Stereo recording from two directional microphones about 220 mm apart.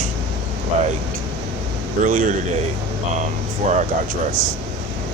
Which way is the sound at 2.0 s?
40° right (ahead or behind).